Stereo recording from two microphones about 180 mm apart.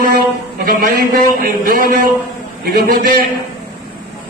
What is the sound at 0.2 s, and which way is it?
A man's voice, 55° right (ahead or behind).